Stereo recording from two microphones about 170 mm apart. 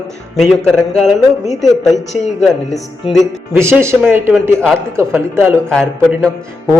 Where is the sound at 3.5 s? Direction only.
15° right (ahead or behind).